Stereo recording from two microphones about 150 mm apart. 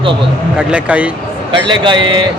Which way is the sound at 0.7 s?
10° right (ahead or behind).